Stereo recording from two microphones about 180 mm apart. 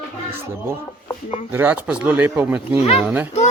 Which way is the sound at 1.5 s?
10° right (ahead or behind).